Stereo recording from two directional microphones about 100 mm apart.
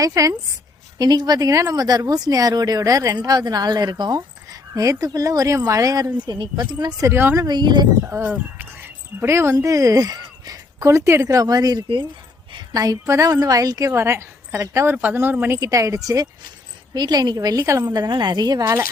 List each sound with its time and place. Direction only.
0.0 s speech: 35° right (ahead or behind)
4.7 s speech: 35° right (ahead or behind)
6.2 s speech: 50° right (ahead or behind)
7.1 s speech: 25° right (ahead or behind)
7.4 s speech: 45° right (ahead or behind)
8.0 s speech: 20° right (ahead or behind)
14.9 s speech: 20° right (ahead or behind)
15.5 s speech: 35° right (ahead or behind)